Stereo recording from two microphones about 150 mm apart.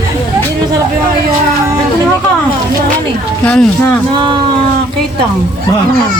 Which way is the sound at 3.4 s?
10° left (ahead or behind).